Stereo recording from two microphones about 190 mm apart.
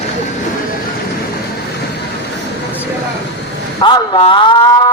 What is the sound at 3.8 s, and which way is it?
A man's voice, 25° left (ahead or behind).